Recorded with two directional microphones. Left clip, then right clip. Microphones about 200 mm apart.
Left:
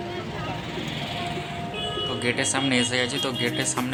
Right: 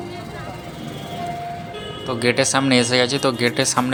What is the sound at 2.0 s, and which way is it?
Speech, 30° right (ahead or behind).